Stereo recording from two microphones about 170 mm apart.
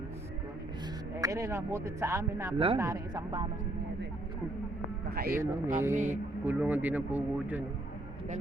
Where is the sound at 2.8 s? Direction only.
15° right (ahead or behind).